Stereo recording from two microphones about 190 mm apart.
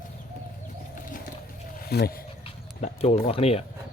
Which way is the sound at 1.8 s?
55° left (ahead or behind).